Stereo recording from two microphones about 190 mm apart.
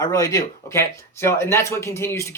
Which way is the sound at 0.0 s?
20° left (ahead or behind).